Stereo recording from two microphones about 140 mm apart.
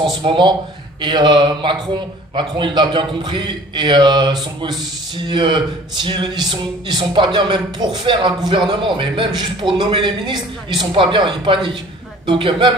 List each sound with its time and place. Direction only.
0.2 s a man's voice: 35° right (ahead or behind)